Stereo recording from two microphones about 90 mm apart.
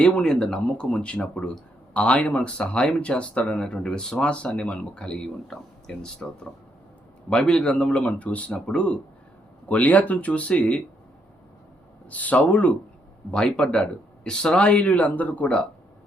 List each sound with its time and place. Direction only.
0.0 s speech: 10° left (ahead or behind)
12.1 s speech: 15° left (ahead or behind)